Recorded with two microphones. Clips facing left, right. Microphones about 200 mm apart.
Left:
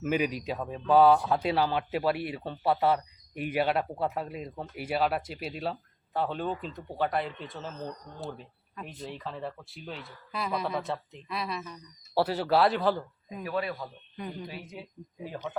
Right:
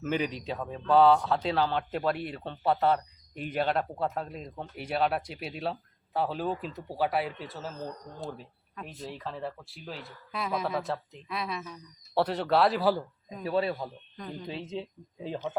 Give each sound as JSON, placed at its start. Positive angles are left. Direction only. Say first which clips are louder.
{"t": 0.0, "sound": "speech", "louder": "left 2 dB", "side_deg": 10}
{"t": 13.4, "sound": "a man's voice", "louder": "right 4 dB", "side_deg": -30}